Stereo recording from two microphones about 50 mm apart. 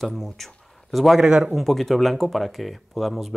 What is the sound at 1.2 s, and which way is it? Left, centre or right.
Speech, centre.